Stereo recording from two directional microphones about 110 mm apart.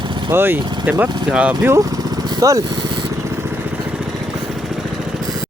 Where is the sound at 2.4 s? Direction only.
30° right (ahead or behind).